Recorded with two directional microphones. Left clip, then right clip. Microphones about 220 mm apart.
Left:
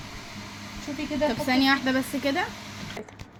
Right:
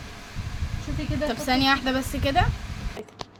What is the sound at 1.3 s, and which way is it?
A woman's voice, 15° right (ahead or behind).